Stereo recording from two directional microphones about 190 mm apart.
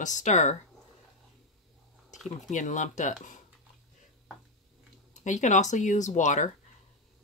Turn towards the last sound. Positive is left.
turn(degrees=40)  # may be behind; listen again after turning